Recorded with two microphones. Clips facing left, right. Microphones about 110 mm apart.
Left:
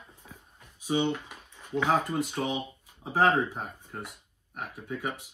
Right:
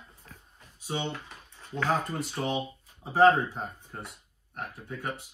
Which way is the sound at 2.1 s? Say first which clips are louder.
Left 1 dB; centre (ahead or behind).